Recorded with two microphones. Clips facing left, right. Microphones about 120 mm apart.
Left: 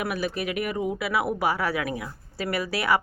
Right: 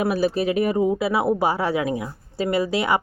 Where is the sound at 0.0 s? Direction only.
30° right (ahead or behind).